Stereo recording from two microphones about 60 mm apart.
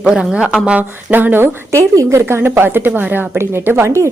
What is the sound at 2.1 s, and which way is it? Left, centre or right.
A woman's voice, right.